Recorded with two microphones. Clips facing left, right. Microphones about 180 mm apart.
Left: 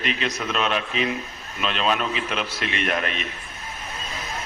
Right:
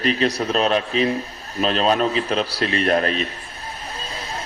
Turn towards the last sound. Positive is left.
turn(degrees=-35)  # may be behind; listen again after turning